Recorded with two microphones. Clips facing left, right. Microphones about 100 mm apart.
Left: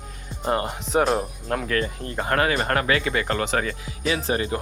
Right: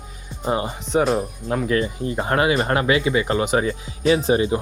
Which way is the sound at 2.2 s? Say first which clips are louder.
Right 2 dB; 20° right (ahead or behind).